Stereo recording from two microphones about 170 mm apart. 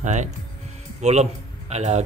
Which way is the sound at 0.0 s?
45° right (ahead or behind).